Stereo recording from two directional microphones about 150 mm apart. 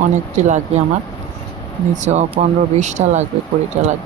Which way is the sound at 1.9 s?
50° right (ahead or behind).